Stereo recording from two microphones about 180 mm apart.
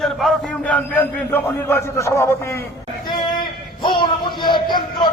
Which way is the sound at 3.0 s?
25° left (ahead or behind).